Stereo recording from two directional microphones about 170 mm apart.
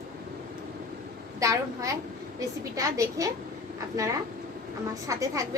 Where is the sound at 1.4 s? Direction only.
20° right (ahead or behind).